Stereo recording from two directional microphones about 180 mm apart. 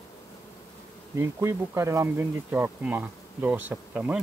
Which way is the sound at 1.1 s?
15° right (ahead or behind).